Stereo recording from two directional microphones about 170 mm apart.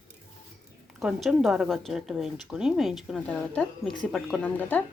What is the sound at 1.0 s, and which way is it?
A woman's voice, 5° right (ahead or behind).